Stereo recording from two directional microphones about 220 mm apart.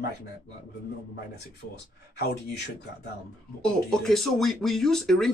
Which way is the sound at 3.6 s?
Centre (ahead or behind).